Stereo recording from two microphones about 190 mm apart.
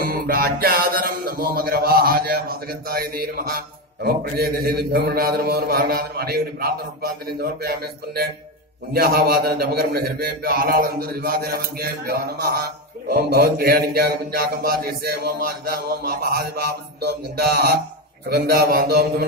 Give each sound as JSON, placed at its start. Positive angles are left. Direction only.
{"t": 0.0, "sound": "speech", "side_deg": -50}